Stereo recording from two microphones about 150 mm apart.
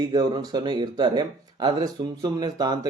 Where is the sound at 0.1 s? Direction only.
25° right (ahead or behind).